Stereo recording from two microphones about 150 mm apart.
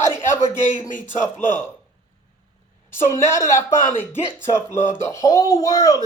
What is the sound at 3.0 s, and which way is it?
Speech, 20° left (ahead or behind).